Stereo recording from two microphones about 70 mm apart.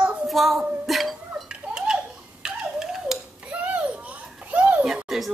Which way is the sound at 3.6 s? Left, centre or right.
Centre.